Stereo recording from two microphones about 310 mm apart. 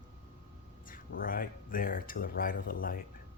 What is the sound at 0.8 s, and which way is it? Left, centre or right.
Speech, left.